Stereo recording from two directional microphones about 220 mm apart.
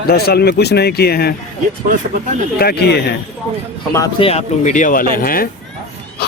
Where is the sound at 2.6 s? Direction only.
45° left (ahead or behind).